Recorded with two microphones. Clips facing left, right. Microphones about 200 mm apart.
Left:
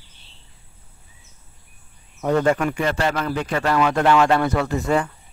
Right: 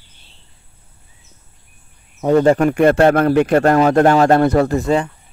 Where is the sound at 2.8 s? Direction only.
55° right (ahead or behind).